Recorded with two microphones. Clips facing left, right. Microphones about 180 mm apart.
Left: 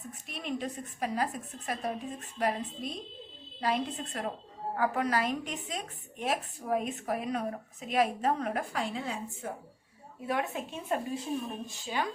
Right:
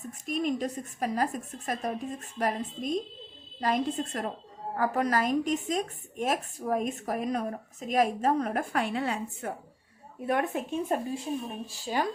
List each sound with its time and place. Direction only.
0.3 s a woman's voice: 45° right (ahead or behind)
8.7 s a woman's voice: 65° right (ahead or behind)
10.2 s a woman's voice: 55° right (ahead or behind)
11.7 s speech: 40° right (ahead or behind)